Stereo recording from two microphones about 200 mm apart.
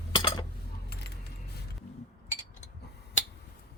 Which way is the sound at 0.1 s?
20° left (ahead or behind).